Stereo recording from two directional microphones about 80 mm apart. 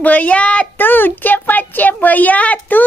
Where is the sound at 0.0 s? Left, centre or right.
Centre.